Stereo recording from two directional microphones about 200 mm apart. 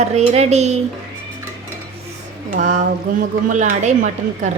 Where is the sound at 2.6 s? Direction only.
40° right (ahead or behind).